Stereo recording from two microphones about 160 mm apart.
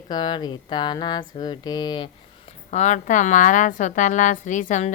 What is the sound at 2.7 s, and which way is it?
A woman's voice, 45° left (ahead or behind).